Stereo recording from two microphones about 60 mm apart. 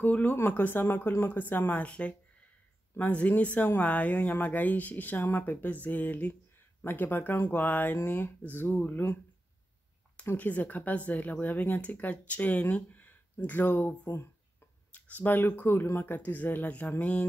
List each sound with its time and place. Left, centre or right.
0.0 s speech: left
10.3 s speech: left
14.0 s speech: left
14.9 s speech: left